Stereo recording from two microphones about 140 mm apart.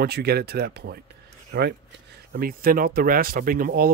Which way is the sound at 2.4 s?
90° right.